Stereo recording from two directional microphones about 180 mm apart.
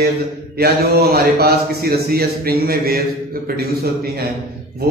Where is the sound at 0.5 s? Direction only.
60° right (ahead or behind).